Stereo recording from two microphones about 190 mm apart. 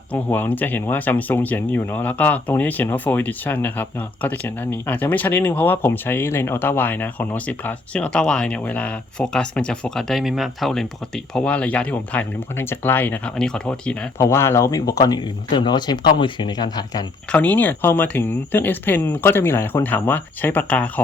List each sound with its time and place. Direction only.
0.1 s speech: 10° left (ahead or behind)
17.3 s speech: 10° left (ahead or behind)